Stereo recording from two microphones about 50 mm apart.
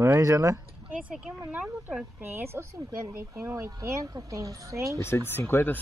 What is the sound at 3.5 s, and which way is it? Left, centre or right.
Speech, right.